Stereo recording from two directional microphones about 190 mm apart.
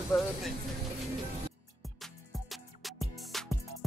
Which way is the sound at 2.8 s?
Centre (ahead or behind).